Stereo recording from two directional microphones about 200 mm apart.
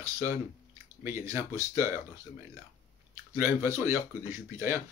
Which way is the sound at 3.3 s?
15° right (ahead or behind).